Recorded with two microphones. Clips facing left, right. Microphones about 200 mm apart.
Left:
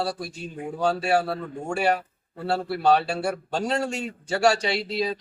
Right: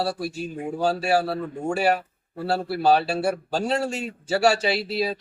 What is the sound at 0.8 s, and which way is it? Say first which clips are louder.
Speech: right 1 dB; 5° right (ahead or behind).